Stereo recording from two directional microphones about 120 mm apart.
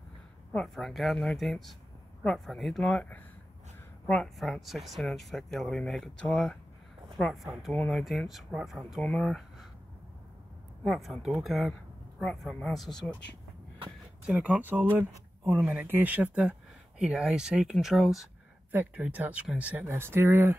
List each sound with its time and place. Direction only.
0.5 s speech: 5° left (ahead or behind)
4.4 s speech: centre (ahead or behind)
10.8 s speech: centre (ahead or behind)
14.2 s speech: 10° right (ahead or behind)
18.7 s speech: 15° right (ahead or behind)